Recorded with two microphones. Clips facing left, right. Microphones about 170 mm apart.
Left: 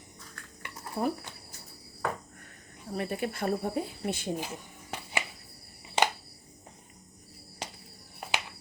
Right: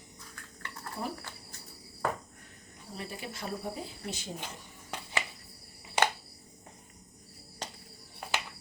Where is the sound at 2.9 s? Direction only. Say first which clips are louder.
Left 9 dB; 55° left (ahead or behind).